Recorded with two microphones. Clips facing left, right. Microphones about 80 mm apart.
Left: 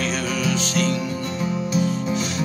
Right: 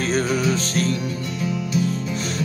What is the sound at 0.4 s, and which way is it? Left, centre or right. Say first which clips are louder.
Music: right 1 dB; right.